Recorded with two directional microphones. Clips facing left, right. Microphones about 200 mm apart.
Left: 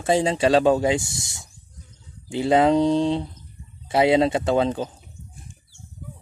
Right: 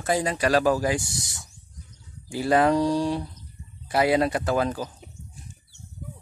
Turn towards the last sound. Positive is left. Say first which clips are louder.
# left 4 dB
turn(degrees=25)  # may be behind; listen again after turning